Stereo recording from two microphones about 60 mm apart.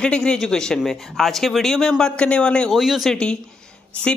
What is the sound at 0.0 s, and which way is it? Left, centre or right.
A man's voice, centre.